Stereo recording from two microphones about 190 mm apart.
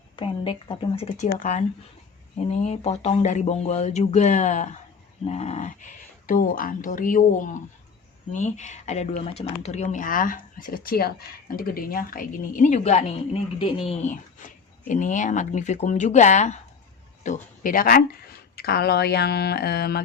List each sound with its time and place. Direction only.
0.2 s speech: 25° left (ahead or behind); by 20.0 s 55° left (ahead or behind)